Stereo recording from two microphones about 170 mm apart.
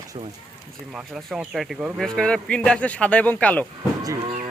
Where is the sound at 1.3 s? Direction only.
Centre (ahead or behind).